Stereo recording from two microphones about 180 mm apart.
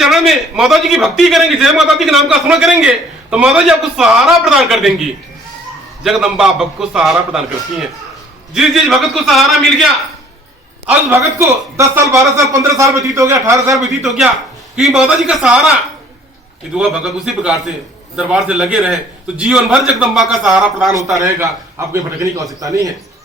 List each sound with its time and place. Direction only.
0.0 s a man's voice: centre (ahead or behind)
10.8 s speech: 15° right (ahead or behind)
14.0 s a man's voice: centre (ahead or behind)
16.7 s a man's voice: 5° right (ahead or behind)
21.2 s speech: 15° right (ahead or behind)